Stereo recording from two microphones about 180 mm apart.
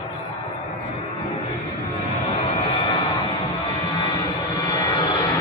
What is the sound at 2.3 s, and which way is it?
Music, 30° left (ahead or behind).